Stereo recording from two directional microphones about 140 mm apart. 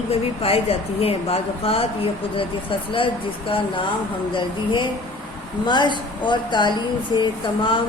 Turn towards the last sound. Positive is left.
turn(degrees=35)  # may be behind; listen again after turning